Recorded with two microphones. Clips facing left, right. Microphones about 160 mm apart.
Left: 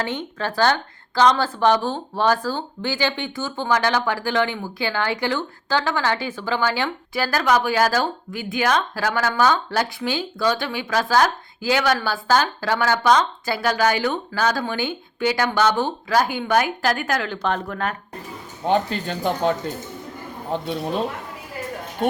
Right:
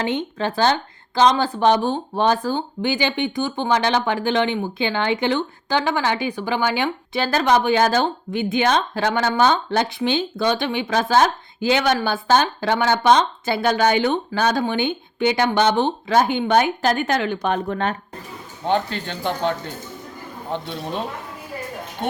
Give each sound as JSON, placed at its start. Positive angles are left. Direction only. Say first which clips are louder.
{"t": 0.0, "sound": "speech", "louder": "right 3 dB", "side_deg": -20}
{"t": 18.7, "sound": "a man's voice", "louder": "left 1 dB", "side_deg": 5}
{"t": 20.5, "sound": "a man's voice", "louder": "left 3 dB", "side_deg": 5}